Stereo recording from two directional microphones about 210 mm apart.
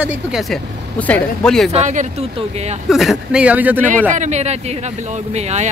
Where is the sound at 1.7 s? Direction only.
35° right (ahead or behind).